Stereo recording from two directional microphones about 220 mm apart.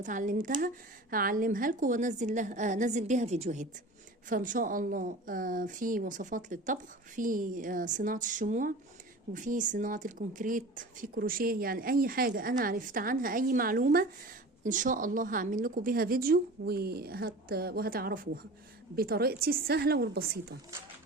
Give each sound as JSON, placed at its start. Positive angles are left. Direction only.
{"t": 0.0, "sound": "a woman's voice", "side_deg": -35}